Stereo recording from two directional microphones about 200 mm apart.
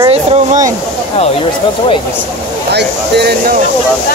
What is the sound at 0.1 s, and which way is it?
Speech, 35° right (ahead or behind).